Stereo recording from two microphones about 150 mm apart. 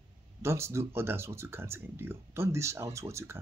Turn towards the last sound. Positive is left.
turn(degrees=-20)  # may be behind; listen again after turning